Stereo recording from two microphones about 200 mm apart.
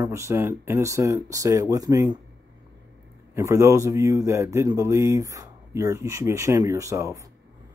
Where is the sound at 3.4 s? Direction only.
15° right (ahead or behind).